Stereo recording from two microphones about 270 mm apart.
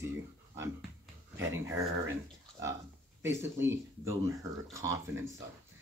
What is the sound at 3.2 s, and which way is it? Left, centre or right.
Speech, centre.